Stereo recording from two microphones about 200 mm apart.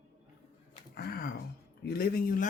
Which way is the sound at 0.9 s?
50° left (ahead or behind).